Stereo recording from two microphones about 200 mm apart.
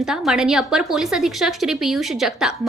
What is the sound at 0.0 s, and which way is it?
A woman's voice, centre (ahead or behind).